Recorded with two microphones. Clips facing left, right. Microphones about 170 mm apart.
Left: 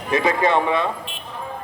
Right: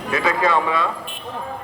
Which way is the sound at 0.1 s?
20° left (ahead or behind).